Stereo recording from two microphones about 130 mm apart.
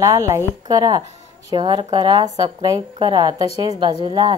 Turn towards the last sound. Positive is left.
turn(degrees=-35)  # may be behind; listen again after turning